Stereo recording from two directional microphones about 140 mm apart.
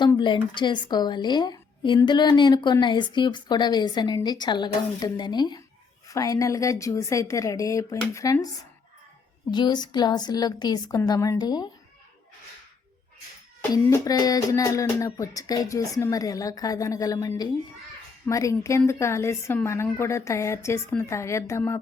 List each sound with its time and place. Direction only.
0.2 s a woman's voice: 35° left (ahead or behind)
9.5 s speech: 30° left (ahead or behind)
13.6 s speech: 25° left (ahead or behind)